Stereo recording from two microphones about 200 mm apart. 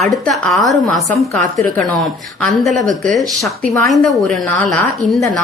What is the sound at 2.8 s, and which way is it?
Speech, 40° right (ahead or behind).